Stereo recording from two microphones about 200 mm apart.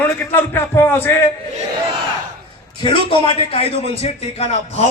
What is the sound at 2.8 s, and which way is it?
A man's voice, 25° left (ahead or behind).